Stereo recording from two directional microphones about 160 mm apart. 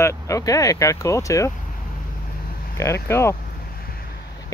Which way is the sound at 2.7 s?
15° left (ahead or behind).